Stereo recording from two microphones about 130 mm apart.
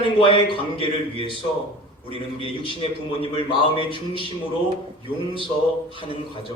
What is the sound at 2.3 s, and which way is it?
Speech, 45° left (ahead or behind).